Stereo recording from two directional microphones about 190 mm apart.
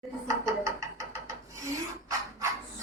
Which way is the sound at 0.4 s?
15° right (ahead or behind).